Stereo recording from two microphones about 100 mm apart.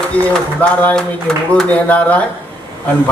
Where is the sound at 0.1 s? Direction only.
15° left (ahead or behind).